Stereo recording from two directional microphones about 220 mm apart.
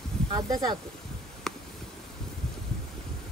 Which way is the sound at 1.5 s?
Centre (ahead or behind).